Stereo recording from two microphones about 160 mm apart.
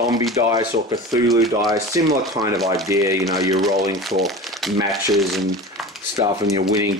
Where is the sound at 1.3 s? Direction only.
Centre (ahead or behind).